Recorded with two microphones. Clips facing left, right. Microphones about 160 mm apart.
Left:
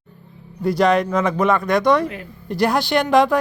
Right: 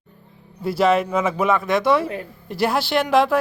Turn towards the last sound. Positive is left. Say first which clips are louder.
# left 2 dB
turn(degrees=0)  # may be behind; listen again after turning